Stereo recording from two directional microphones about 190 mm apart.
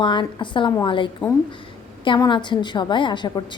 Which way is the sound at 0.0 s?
25° left (ahead or behind).